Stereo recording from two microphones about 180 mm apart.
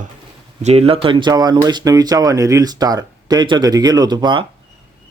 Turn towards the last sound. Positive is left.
turn(degrees=-25)  # may be behind; listen again after turning